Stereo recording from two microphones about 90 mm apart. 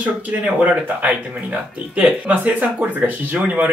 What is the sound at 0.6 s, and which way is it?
Speech, 15° right (ahead or behind).